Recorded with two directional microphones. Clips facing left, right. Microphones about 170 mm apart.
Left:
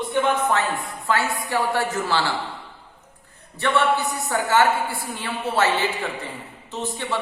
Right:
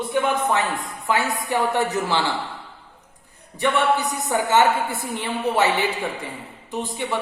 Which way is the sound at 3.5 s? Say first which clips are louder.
Right 1 dB; 15° right (ahead or behind).